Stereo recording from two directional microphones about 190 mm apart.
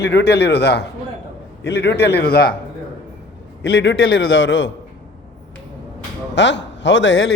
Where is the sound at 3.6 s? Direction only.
65° left (ahead or behind).